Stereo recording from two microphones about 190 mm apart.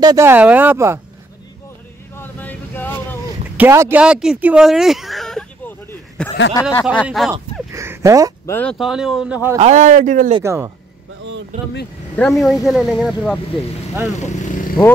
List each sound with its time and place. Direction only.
0.0 s speech: 15° right (ahead or behind)
2.1 s vehicle: 10° left (ahead or behind)
3.5 s speech: 10° right (ahead or behind)
7.7 s a sound: 15° right (ahead or behind)
8.5 s speech: 10° left (ahead or behind)
8.7 s speech: 5° right (ahead or behind)
9.6 s speech: 40° right (ahead or behind)
10.4 s speech: 15° right (ahead or behind)
11.5 s speech: 40° right (ahead or behind)
12.2 s speech: centre (ahead or behind)
14.2 s vehicle: 40° left (ahead or behind)